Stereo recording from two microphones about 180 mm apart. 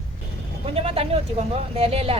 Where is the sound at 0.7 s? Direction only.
30° right (ahead or behind).